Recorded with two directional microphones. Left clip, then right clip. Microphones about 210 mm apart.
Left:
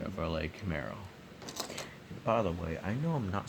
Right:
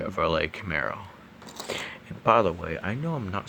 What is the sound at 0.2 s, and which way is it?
Speech, 50° right (ahead or behind).